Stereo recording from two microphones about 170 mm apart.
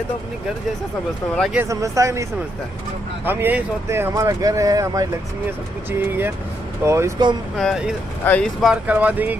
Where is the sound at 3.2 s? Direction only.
10° right (ahead or behind).